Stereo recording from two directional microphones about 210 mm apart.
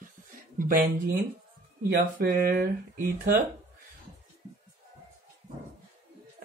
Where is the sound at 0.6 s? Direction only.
45° right (ahead or behind).